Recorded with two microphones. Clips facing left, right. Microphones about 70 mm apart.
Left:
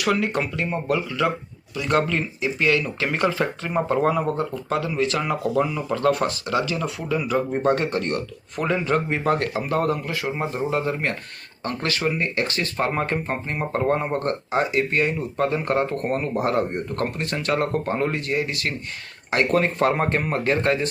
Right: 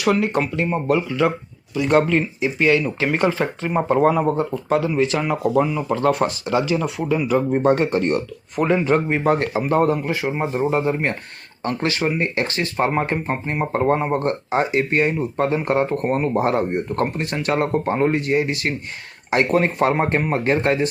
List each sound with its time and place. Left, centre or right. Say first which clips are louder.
0.0 s speech: right 3 dB; centre